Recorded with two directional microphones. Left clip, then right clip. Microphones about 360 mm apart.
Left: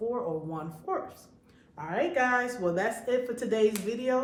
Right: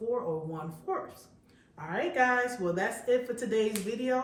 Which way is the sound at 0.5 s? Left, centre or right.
Centre.